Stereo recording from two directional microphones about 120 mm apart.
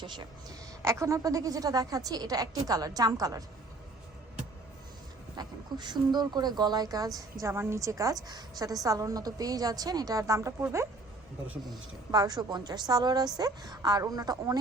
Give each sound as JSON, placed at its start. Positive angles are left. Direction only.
{"t": 0.0, "sound": "a woman's voice", "side_deg": -40}
{"t": 0.8, "sound": "a woman's voice", "side_deg": -25}
{"t": 5.4, "sound": "a woman's voice", "side_deg": -35}
{"t": 12.1, "sound": "a woman's voice", "side_deg": -35}